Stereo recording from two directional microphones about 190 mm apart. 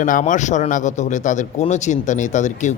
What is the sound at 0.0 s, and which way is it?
Speech, 40° left (ahead or behind).